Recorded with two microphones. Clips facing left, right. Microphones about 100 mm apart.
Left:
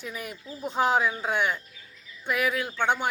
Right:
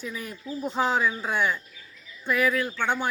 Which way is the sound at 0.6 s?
15° left (ahead or behind).